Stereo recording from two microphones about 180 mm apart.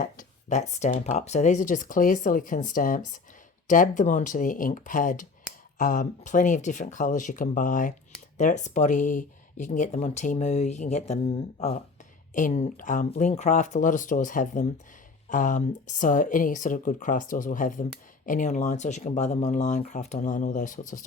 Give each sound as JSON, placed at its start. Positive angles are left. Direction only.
{"t": 0.0, "sound": "speech", "side_deg": 45}